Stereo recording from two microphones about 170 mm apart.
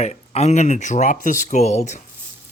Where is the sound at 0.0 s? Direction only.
40° left (ahead or behind).